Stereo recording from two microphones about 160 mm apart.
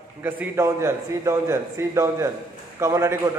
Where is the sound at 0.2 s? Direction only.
15° right (ahead or behind).